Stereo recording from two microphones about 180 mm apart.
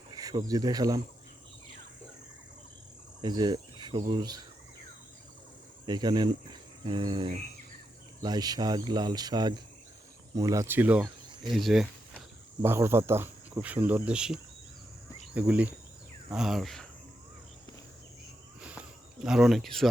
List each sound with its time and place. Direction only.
0.1 s speech: 20° right (ahead or behind)
3.2 s speech: 25° right (ahead or behind)
5.8 s speech: 25° right (ahead or behind); by 11.9 s centre (ahead or behind)
12.6 s speech: 15° right (ahead or behind)
15.4 s speech: 10° right (ahead or behind)
18.6 s a sound: 5° right (ahead or behind)